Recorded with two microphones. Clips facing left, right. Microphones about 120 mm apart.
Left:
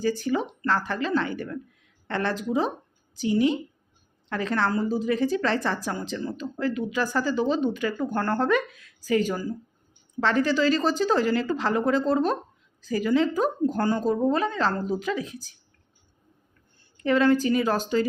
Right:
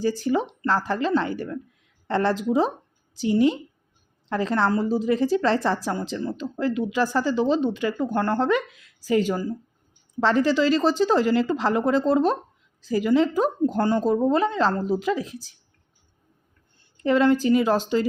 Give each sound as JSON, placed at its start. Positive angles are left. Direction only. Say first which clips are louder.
{"t": 0.0, "sound": "a woman's voice", "louder": "right 2 dB", "side_deg": -30}
{"t": 17.0, "sound": "a woman's voice", "louder": "right 1 dB", "side_deg": -25}